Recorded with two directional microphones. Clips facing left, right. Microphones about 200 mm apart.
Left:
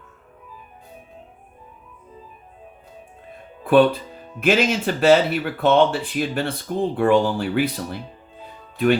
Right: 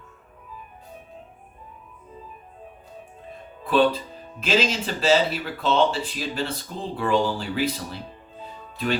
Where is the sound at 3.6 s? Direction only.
60° left (ahead or behind).